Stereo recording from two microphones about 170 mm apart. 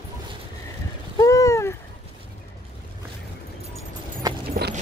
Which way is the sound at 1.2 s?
20° left (ahead or behind).